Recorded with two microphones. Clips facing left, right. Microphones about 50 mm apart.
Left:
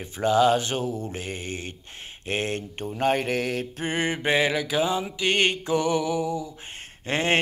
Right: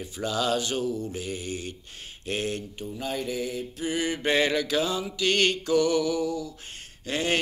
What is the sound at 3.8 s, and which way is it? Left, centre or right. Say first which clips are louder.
Mantra: right 1 dB; left.